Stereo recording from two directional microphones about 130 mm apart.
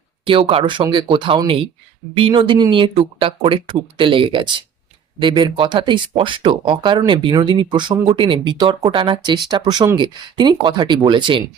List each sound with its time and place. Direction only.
0.3 s speech: 40° right (ahead or behind)